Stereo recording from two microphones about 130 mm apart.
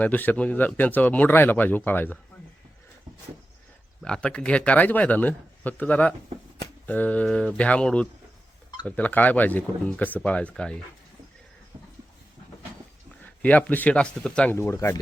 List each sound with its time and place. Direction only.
0.0 s a man's voice: 15° left (ahead or behind)
4.0 s a man's voice: 5° left (ahead or behind)
13.4 s a man's voice: 10° left (ahead or behind)
14.5 s speech: 20° left (ahead or behind)